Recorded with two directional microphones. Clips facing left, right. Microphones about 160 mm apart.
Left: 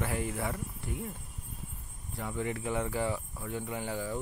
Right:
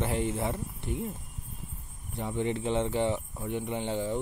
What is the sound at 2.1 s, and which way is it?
Speech, 25° right (ahead or behind).